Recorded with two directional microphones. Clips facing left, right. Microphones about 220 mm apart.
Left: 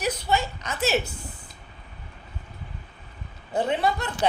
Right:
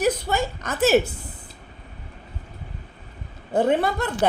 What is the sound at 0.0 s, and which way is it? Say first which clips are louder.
A woman's voice: right 4 dB; 50° right (ahead or behind).